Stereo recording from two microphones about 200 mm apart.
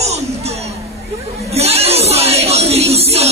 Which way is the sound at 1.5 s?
30° right (ahead or behind).